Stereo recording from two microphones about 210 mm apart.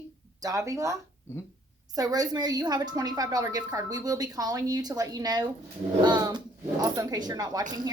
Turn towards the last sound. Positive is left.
turn(degrees=-20)  # may be behind; listen again after turning